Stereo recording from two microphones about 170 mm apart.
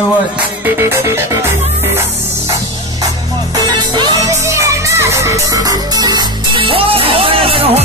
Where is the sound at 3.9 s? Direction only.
20° right (ahead or behind).